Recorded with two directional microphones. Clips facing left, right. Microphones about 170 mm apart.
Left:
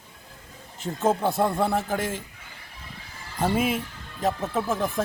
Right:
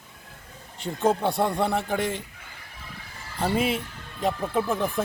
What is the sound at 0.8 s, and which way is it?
A man's voice, 5° left (ahead or behind).